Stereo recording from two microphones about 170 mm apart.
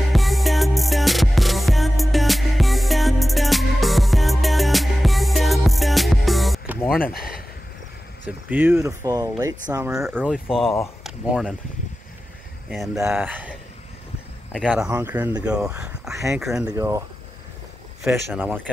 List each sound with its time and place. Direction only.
0.1 s music: centre (ahead or behind)
7.0 s speech: 60° left (ahead or behind)
8.3 s speech: 10° right (ahead or behind)
9.9 s speech: 5° right (ahead or behind)
12.6 s speech: centre (ahead or behind)
14.5 s speech: 5° left (ahead or behind)
15.0 s speech: 10° right (ahead or behind)
16.7 s speech: 15° right (ahead or behind)
18.0 s speech: 10° right (ahead or behind)